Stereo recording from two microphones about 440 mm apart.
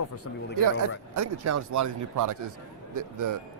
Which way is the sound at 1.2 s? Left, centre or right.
Right.